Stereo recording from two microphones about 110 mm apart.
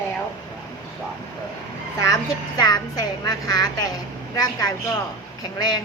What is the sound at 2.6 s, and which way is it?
A woman's voice, 35° left (ahead or behind).